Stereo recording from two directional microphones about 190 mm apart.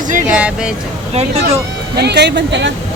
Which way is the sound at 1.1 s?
35° right (ahead or behind).